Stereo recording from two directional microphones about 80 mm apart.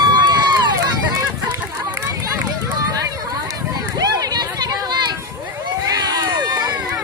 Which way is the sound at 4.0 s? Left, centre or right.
Right.